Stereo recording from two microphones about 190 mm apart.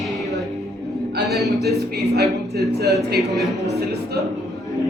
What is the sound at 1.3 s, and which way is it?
Speech, centre (ahead or behind).